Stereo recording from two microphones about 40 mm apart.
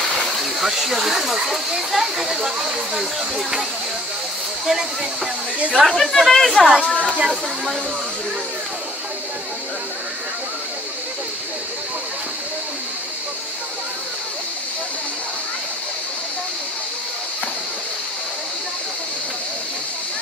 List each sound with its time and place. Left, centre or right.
0.1 s a sound: centre
1.9 s speech: centre
4.6 s speech: centre
5.8 s speech: centre
6.9 s speech: left